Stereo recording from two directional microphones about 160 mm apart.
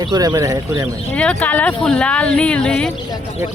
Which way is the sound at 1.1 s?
10° left (ahead or behind).